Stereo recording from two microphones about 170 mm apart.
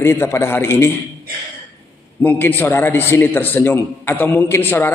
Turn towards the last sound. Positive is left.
turn(degrees=15)  # may be behind; listen again after turning